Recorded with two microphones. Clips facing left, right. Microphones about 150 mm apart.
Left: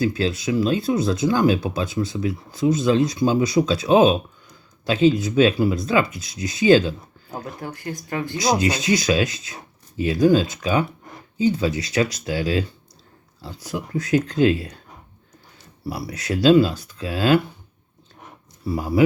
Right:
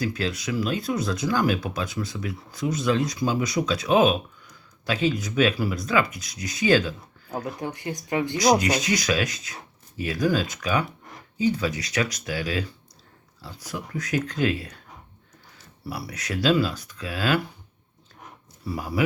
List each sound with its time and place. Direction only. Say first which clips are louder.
0.0 s speech: left 6 dB; 30° left (ahead or behind)
7.4 s speech: even; 20° right (ahead or behind)
8.4 s speech: even; 25° left (ahead or behind)
15.9 s speech: left 5 dB; 25° left (ahead or behind)
18.6 s speech: left 7 dB; 25° left (ahead or behind)